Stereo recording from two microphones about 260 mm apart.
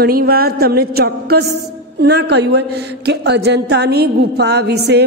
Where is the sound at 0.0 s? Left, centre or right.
Right.